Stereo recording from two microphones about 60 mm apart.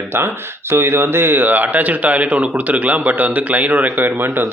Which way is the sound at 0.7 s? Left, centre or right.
Right.